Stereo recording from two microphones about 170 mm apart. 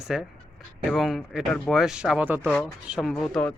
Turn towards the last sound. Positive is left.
turn(degrees=5)  # may be behind; listen again after turning